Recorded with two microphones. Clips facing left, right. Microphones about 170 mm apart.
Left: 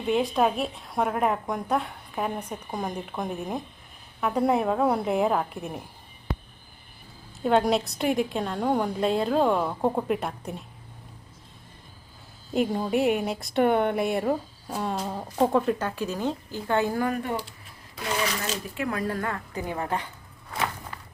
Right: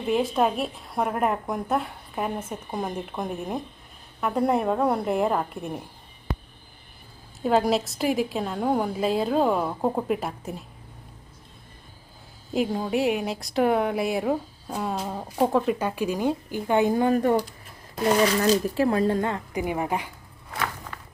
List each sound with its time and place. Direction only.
0.1 s speech: centre (ahead or behind)
7.4 s speech: centre (ahead or behind)
12.5 s speech: centre (ahead or behind); by 17.2 s 20° right (ahead or behind)
17.2 s speech: 40° right (ahead or behind); by 20.1 s 10° right (ahead or behind)